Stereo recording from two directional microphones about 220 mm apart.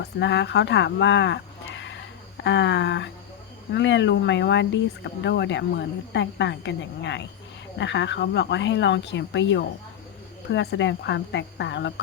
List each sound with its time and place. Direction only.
0.0 s speech: 55° left (ahead or behind)